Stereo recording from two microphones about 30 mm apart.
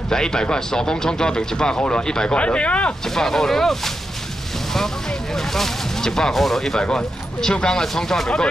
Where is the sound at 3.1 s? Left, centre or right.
Centre.